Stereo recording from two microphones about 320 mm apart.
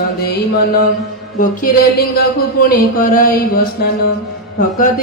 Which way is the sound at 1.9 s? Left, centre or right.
Left.